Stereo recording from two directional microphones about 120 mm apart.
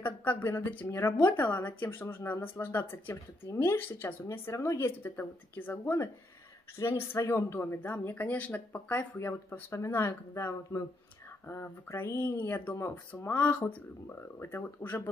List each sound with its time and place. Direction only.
0.0 s a woman's voice: 15° left (ahead or behind)